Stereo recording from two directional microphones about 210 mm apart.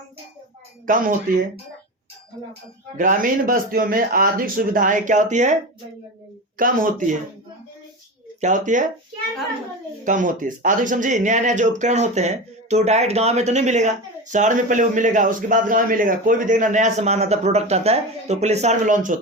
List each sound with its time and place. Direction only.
0.9 s speech: 40° right (ahead or behind)
3.0 s speech: 40° right (ahead or behind)
6.6 s speech: 40° right (ahead or behind)
8.4 s speech: 35° right (ahead or behind)
10.0 s speech: 35° right (ahead or behind)